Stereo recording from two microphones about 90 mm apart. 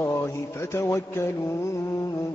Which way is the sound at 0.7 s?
30° left (ahead or behind).